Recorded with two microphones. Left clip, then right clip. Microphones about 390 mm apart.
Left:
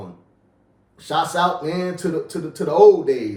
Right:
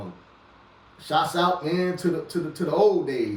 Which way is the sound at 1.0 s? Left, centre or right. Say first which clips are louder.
Left 3 dB; centre.